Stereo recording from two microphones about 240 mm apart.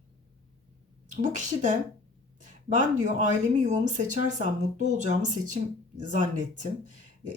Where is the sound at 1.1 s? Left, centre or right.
Right.